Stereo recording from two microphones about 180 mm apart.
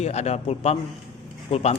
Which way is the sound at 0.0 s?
35° left (ahead or behind).